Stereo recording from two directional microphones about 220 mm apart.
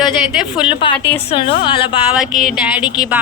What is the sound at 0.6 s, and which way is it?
A woman's voice, 25° left (ahead or behind).